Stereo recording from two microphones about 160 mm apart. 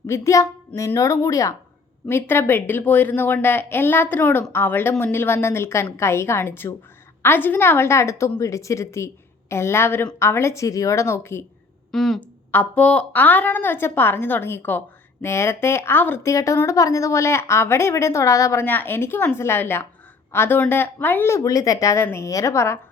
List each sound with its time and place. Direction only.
0.1 s a woman's voice: 20° left (ahead or behind)
11.9 s a woman's voice: centre (ahead or behind); by 22.8 s 15° left (ahead or behind)